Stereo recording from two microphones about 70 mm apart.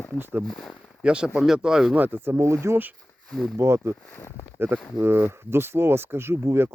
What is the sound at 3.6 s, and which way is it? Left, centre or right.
Speech, right.